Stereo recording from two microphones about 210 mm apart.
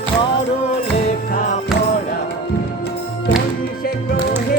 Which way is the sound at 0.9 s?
35° left (ahead or behind).